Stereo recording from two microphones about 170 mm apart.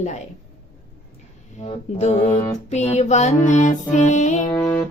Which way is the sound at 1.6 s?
40° left (ahead or behind).